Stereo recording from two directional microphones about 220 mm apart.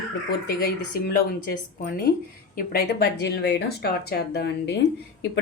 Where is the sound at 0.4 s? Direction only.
45° left (ahead or behind).